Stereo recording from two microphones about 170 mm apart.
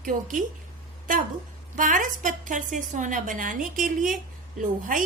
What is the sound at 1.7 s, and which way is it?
A woman's voice, 50° right (ahead or behind).